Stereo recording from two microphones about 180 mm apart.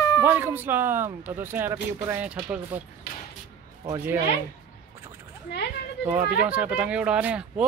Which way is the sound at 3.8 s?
15° right (ahead or behind).